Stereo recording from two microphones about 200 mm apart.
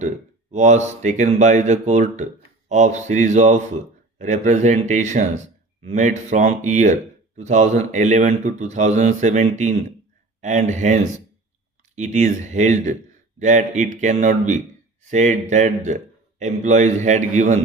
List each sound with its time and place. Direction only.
0.5 s speech: 35° right (ahead or behind)